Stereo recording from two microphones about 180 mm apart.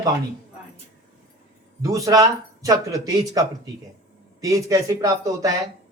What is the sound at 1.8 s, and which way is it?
Speech, 20° right (ahead or behind).